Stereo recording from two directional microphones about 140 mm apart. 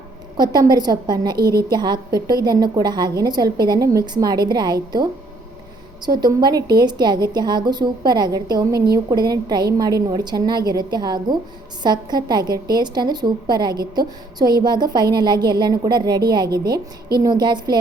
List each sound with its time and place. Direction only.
0.3 s a woman's voice: 30° right (ahead or behind)
6.2 s a woman's voice: 30° right (ahead or behind)